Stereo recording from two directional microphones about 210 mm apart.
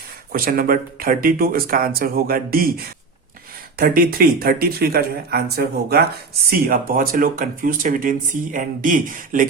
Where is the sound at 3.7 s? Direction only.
45° right (ahead or behind).